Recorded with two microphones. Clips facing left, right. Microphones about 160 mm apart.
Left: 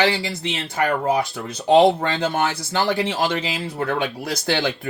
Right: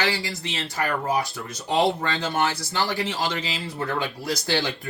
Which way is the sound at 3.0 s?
60° left (ahead or behind).